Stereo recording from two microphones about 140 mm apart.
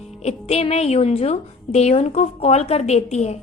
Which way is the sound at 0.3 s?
50° left (ahead or behind).